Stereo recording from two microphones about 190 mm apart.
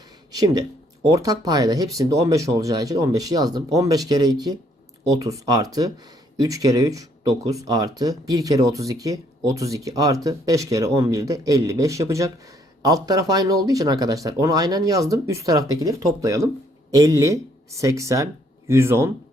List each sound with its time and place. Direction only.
0.3 s speech: 20° right (ahead or behind)